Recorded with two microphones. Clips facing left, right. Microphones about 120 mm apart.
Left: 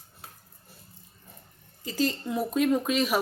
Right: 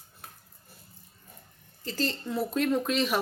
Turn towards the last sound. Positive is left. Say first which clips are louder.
# left 2 dB
turn(degrees=10)  # may be behind; listen again after turning